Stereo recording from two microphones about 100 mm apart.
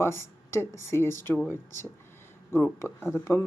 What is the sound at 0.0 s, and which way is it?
Speech, 25° left (ahead or behind).